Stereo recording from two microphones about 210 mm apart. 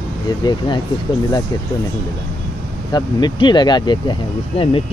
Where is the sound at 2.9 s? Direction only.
20° left (ahead or behind).